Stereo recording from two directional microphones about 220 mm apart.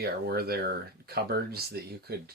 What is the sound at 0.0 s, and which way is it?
Speech, 45° right (ahead or behind).